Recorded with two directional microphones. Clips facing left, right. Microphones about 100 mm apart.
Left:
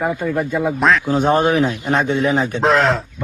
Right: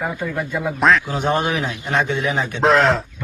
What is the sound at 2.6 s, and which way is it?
Speech, centre (ahead or behind).